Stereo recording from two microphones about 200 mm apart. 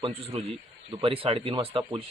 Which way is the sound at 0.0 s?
30° right (ahead or behind).